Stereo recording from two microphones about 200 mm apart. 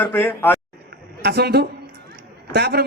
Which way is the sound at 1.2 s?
55° right (ahead or behind).